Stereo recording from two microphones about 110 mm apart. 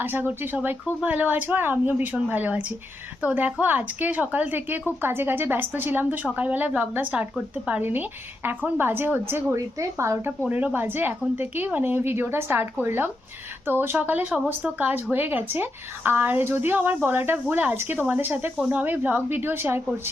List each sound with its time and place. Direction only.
0.0 s speech: 20° right (ahead or behind)
10.5 s speech: 15° right (ahead or behind)